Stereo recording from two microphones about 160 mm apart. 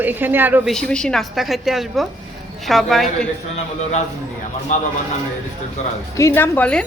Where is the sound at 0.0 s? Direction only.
10° right (ahead or behind).